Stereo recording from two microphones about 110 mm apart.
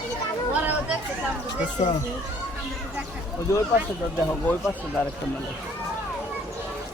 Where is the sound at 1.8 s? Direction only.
90° left.